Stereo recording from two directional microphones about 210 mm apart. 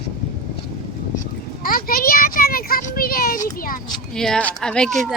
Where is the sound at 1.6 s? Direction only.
45° left (ahead or behind).